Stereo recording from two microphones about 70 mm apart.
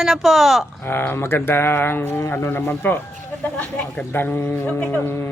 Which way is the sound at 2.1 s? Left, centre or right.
Left.